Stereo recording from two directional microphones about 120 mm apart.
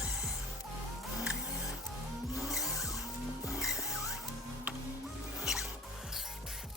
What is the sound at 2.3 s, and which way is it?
Vehicle, centre (ahead or behind).